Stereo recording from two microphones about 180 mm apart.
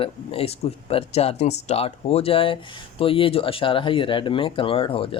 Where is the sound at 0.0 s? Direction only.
30° left (ahead or behind).